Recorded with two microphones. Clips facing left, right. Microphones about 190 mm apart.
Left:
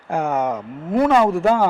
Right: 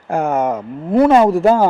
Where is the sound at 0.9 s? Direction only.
30° right (ahead or behind).